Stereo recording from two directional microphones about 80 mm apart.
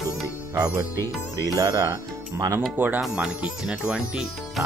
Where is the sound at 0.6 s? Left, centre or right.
Right.